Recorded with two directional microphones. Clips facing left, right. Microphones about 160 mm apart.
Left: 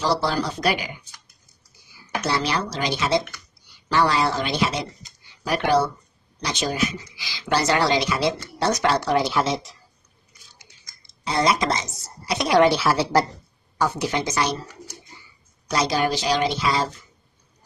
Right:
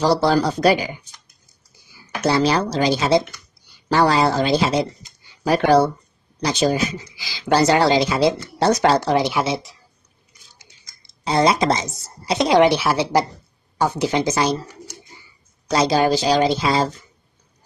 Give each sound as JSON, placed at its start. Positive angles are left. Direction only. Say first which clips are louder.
{"t": 0.3, "sound": "speech", "louder": "right 7 dB", "side_deg": -40}
{"t": 2.3, "sound": "speech", "louder": "right 8 dB", "side_deg": -35}
{"t": 11.2, "sound": "speech", "louder": "right 4 dB", "side_deg": -30}
{"t": 15.7, "sound": "speech", "louder": "right 5 dB", "side_deg": -30}